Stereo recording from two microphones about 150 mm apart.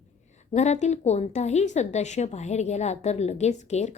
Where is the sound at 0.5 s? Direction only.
50° left (ahead or behind).